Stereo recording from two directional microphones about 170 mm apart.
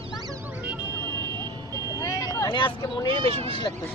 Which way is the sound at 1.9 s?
20° left (ahead or behind).